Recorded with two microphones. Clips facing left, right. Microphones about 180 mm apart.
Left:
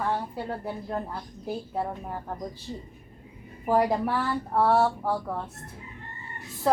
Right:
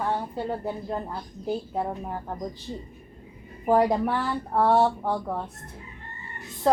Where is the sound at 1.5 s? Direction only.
15° right (ahead or behind).